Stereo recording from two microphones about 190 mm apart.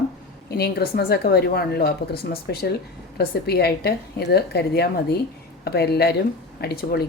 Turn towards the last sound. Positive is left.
turn(degrees=55)  # may be behind; listen again after turning